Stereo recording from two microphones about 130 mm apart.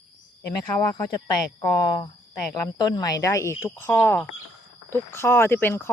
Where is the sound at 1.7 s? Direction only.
25° left (ahead or behind).